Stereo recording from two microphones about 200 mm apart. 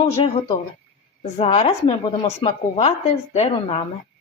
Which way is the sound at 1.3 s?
35° left (ahead or behind).